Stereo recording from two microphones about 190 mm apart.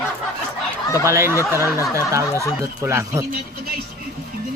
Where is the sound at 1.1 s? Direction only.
15° right (ahead or behind).